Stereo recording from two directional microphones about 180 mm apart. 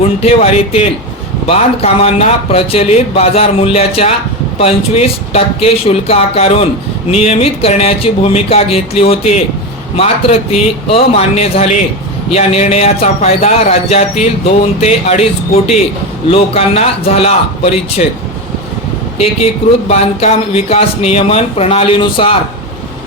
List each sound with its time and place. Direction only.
0.0 s speech: 35° left (ahead or behind)
19.9 s speech: 35° left (ahead or behind)